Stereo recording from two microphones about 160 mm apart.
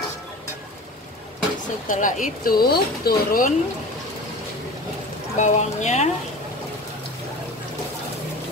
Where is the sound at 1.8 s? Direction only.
55° left (ahead or behind).